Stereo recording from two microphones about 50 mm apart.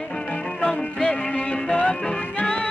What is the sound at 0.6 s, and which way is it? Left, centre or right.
Music, centre.